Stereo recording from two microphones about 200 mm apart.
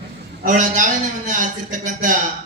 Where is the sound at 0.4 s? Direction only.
40° right (ahead or behind).